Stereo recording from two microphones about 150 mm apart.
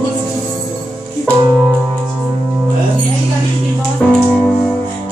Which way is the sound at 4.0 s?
10° left (ahead or behind).